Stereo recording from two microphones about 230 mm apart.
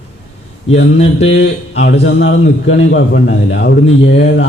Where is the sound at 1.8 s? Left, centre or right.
Left.